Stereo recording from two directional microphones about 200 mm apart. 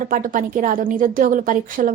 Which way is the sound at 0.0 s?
40° right (ahead or behind).